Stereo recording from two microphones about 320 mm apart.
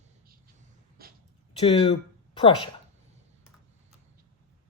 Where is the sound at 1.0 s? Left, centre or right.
Right.